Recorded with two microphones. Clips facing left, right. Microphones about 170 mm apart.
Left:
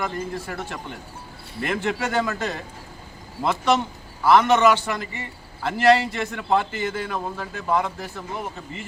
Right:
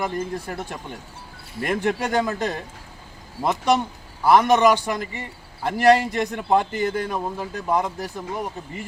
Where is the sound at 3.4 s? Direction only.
10° right (ahead or behind).